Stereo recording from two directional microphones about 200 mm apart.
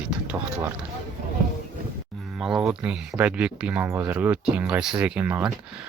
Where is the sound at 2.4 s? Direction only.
5° right (ahead or behind).